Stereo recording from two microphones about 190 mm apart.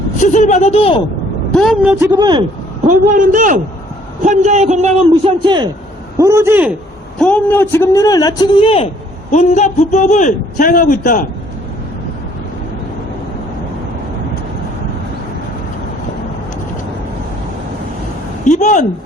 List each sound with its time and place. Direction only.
0.2 s a man's voice: 40° left (ahead or behind)
1.5 s a woman's voice: centre (ahead or behind)
2.1 s speech: 20° right (ahead or behind)
2.8 s a man's voice: 45° right (ahead or behind); by 5.6 s 25° right (ahead or behind)
6.1 s a man's voice: 15° right (ahead or behind)
7.2 s a man's voice: 5° left (ahead or behind); by 11.3 s 45° left (ahead or behind)
18.4 s a man's voice: 40° left (ahead or behind)